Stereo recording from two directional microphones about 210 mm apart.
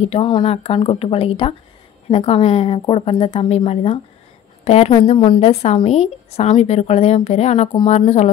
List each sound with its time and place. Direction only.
0.1 s a woman's voice: 25° left (ahead or behind)